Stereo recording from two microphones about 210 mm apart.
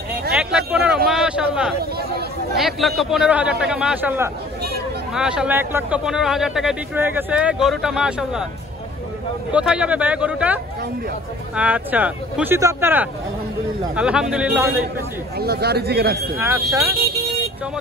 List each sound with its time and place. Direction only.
0.3 s a sound: 5° right (ahead or behind)
1.8 s chatter: 50° right (ahead or behind)
2.5 s a man's voice: centre (ahead or behind)
9.5 s a man's voice: 5° right (ahead or behind)
15.3 s speech: 50° right (ahead or behind)
16.3 s speech: 10° right (ahead or behind)